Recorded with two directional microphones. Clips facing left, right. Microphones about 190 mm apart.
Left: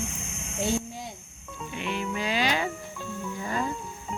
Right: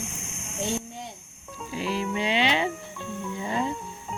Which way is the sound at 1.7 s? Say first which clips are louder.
Right 3 dB; 30° right (ahead or behind).